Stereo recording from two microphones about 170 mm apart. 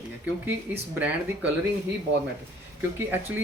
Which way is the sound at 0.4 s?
10° right (ahead or behind).